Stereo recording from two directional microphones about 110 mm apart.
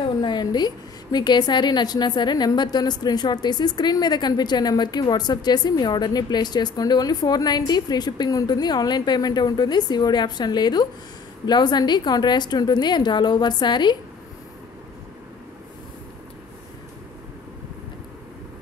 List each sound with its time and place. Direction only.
0.2 s a woman's voice: 40° left (ahead or behind)